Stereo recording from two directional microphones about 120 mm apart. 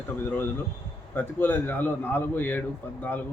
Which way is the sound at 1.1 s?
15° left (ahead or behind).